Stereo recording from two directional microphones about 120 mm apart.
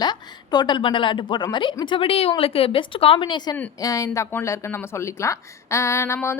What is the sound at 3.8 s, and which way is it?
Speech, 30° left (ahead or behind).